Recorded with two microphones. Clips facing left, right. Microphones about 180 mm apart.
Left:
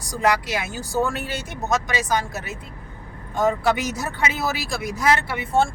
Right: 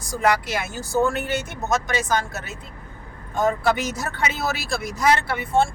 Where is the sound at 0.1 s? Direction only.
15° left (ahead or behind).